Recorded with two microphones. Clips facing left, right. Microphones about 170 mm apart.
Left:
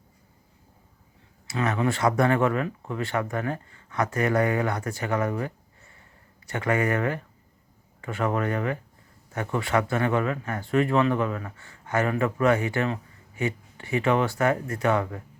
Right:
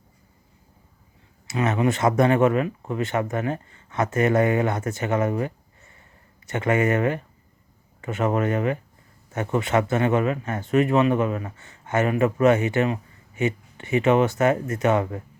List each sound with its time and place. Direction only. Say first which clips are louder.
1.5 s speech: right 3 dB; 20° right (ahead or behind)